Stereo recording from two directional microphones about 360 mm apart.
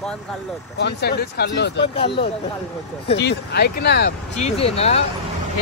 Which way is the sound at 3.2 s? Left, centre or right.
Left.